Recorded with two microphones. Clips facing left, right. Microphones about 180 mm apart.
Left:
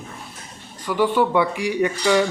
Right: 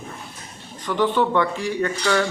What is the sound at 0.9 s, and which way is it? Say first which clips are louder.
Speech: left 1 dB; 10° left (ahead or behind).